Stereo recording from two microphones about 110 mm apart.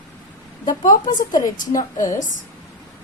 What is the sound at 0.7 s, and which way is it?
Speech, 35° left (ahead or behind).